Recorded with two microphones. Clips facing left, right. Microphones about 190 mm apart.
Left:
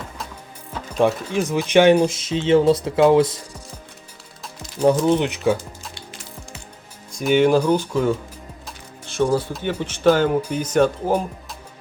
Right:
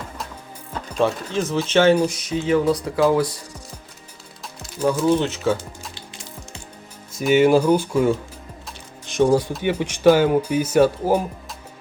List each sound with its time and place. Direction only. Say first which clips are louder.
0.7 s speech: left 2 dB; 10° left (ahead or behind)
5.0 s speech: left 1 dB; 15° left (ahead or behind)
7.1 s speech: right 1 dB; 5° right (ahead or behind)